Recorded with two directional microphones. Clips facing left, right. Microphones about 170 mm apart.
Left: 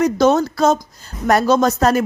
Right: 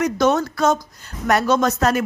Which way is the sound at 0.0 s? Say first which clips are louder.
Left 4 dB; 30° left (ahead or behind).